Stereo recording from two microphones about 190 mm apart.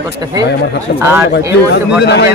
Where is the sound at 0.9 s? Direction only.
50° left (ahead or behind).